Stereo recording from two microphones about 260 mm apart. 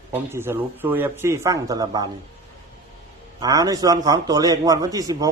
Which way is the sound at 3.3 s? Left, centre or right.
Centre.